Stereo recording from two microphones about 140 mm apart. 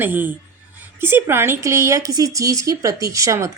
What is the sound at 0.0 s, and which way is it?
Speech, 15° right (ahead or behind).